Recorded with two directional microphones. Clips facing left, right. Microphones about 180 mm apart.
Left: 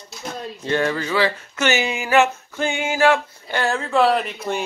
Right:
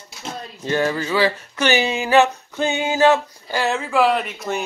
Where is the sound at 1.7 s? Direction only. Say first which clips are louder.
Right 3 dB; 20° right (ahead or behind).